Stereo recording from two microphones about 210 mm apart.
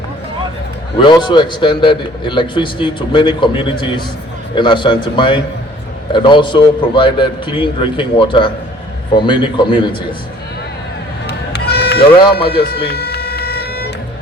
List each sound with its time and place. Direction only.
0.9 s a man's voice: 20° left (ahead or behind)
11.3 s run: 50° left (ahead or behind)
12.3 s music: 50° left (ahead or behind)